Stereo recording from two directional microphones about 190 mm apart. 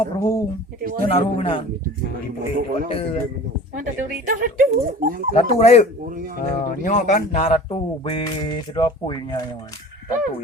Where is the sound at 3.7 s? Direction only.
45° right (ahead or behind).